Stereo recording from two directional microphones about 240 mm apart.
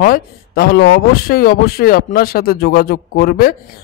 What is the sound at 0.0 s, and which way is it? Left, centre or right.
Speech, left.